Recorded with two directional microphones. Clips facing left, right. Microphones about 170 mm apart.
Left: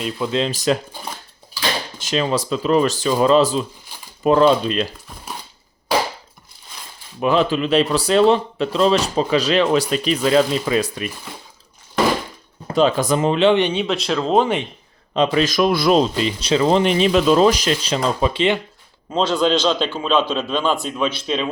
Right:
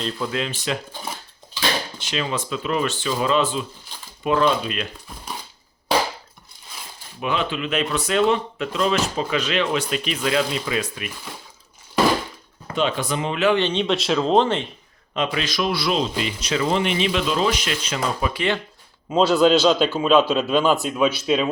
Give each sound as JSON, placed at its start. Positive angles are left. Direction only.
{"t": 0.3, "sound": "speech", "side_deg": 30}
{"t": 2.0, "sound": "speech", "side_deg": 40}
{"t": 7.2, "sound": "speech", "side_deg": 35}
{"t": 12.6, "sound": "speech", "side_deg": 35}
{"t": 13.4, "sound": "speech", "side_deg": 25}
{"t": 13.7, "sound": "speech", "side_deg": 5}
{"t": 15.1, "sound": "speech", "side_deg": 35}
{"t": 19.1, "sound": "a man's voice", "side_deg": -5}